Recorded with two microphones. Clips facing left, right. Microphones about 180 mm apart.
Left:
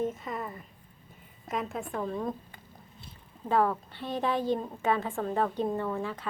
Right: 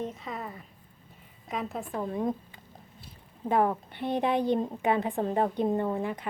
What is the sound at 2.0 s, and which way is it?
Speech, 20° right (ahead or behind).